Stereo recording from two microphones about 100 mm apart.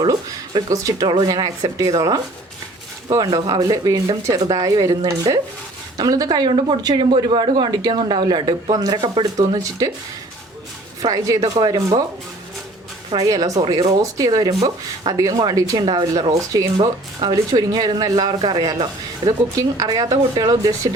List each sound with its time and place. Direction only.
0.0 s speech: 40° right (ahead or behind)
11.0 s speech: 35° right (ahead or behind)
13.1 s speech: 40° right (ahead or behind)